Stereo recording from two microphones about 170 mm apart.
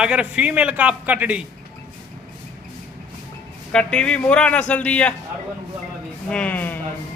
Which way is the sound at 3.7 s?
5° left (ahead or behind).